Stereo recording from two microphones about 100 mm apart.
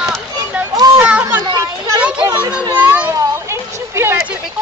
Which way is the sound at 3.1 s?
25° right (ahead or behind).